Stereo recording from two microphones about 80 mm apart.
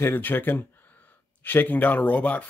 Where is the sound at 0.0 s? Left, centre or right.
Left.